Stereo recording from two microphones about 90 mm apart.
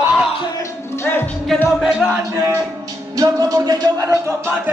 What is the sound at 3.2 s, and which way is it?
Speech, 45° right (ahead or behind).